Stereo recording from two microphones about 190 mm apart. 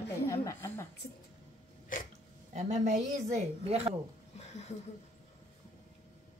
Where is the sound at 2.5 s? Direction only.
35° right (ahead or behind).